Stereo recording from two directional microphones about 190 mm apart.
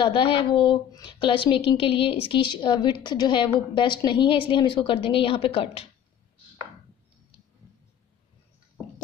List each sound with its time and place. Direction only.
0.0 s a woman's voice: 25° left (ahead or behind)